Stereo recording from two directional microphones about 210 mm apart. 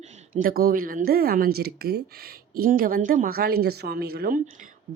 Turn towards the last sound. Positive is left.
turn(degrees=-45)  # may be behind; listen again after turning